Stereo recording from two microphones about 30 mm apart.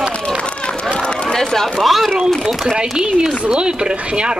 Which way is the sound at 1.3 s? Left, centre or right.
Centre.